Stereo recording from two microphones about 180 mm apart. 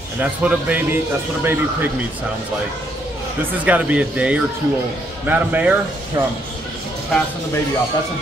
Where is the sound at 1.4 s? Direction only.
10° right (ahead or behind).